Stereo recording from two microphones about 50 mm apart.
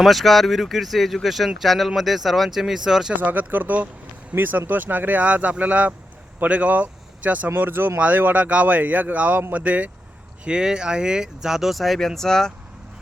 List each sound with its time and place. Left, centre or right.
0.0 s speech: centre
3.2 s speech: right
10.4 s speech: centre